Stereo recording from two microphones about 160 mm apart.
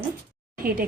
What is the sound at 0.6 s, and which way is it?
Speech, 65° right (ahead or behind).